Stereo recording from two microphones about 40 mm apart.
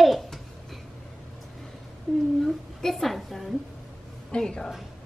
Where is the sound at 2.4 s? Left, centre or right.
Centre.